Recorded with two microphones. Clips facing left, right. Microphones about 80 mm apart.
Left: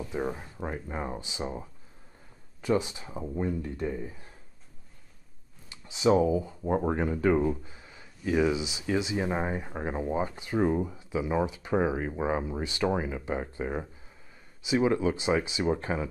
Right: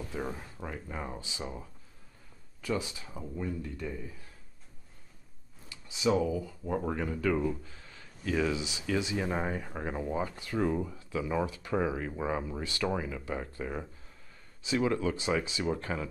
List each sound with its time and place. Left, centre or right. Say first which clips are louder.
0.0 s speech: left 5 dB; left
5.7 s speech: left 5 dB; left